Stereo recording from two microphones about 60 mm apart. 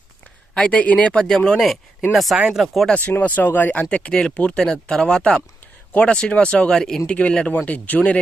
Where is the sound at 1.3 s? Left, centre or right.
Centre.